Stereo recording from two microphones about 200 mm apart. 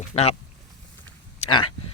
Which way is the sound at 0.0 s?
30° left (ahead or behind).